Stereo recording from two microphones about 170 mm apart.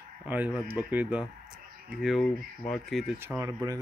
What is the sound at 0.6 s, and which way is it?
Speech, 10° right (ahead or behind).